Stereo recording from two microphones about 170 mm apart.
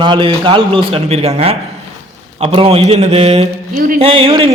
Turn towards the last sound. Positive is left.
turn(degrees=-35)  # may be behind; listen again after turning